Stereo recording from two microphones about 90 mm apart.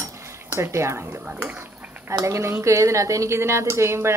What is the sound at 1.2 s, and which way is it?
Speech, 15° right (ahead or behind).